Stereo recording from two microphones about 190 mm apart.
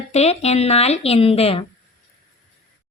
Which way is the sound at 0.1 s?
35° left (ahead or behind).